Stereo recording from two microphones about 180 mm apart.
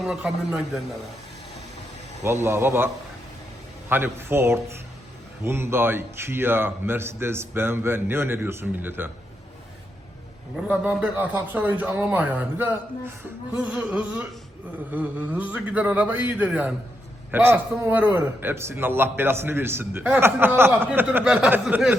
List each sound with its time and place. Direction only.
0.0 s speech: centre (ahead or behind)
2.2 s speech: 15° right (ahead or behind)
10.7 s speech: 10° right (ahead or behind)